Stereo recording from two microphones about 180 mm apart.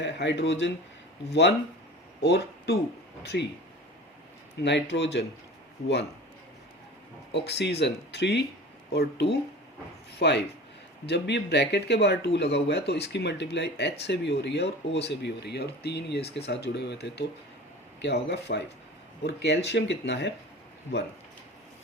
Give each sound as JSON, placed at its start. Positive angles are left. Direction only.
{"t": 0.0, "sound": "speech", "side_deg": 75}
{"t": 4.6, "sound": "speech", "side_deg": 75}
{"t": 7.3, "sound": "speech", "side_deg": 70}